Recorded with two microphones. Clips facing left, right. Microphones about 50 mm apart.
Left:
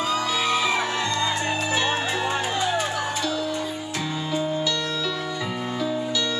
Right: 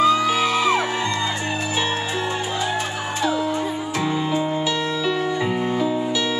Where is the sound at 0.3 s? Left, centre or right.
Centre.